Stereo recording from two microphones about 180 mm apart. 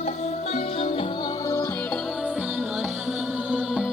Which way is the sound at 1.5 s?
15° left (ahead or behind).